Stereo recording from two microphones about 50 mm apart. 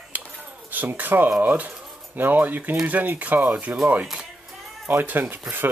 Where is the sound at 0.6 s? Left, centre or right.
Right.